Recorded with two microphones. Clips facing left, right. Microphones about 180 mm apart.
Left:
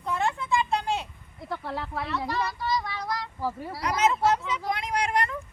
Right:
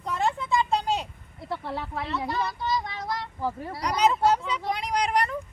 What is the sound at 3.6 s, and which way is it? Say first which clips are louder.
Speech: even; 5° left (ahead or behind).